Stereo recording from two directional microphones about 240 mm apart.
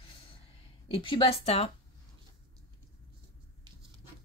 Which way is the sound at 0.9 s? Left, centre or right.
Left.